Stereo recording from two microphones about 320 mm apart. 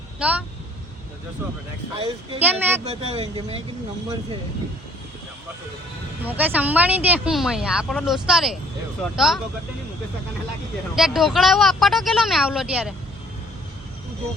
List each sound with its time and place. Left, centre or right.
0.2 s speech: centre
2.0 s speech: centre
2.4 s speech: centre
2.9 s speech: centre
6.2 s speech: centre
10.9 s speech: centre